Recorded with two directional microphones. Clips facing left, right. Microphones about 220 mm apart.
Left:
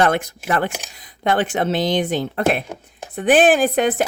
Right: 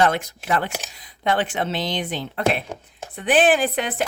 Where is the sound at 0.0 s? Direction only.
50° left (ahead or behind).